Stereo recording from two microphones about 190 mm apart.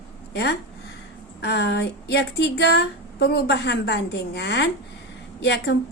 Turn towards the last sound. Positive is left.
turn(degrees=65)  # may be behind; listen again after turning